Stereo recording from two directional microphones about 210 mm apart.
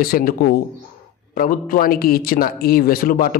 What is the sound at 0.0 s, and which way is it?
Speech, 45° left (ahead or behind).